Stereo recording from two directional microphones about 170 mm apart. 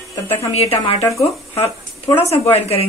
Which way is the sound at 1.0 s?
20° left (ahead or behind).